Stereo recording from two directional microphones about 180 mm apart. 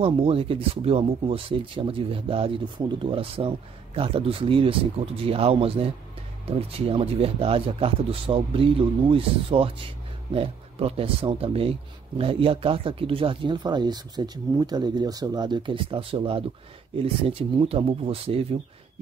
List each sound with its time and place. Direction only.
0.0 s speech: 30° right (ahead or behind)